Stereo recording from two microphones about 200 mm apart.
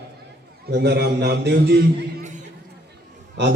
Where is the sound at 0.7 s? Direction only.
55° right (ahead or behind).